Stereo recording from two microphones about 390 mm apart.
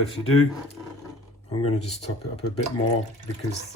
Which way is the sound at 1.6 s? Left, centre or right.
Centre.